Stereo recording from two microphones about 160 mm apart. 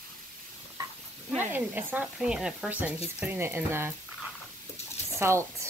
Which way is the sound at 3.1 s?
10° right (ahead or behind).